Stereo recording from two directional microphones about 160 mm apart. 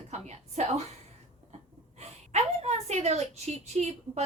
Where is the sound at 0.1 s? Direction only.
45° right (ahead or behind).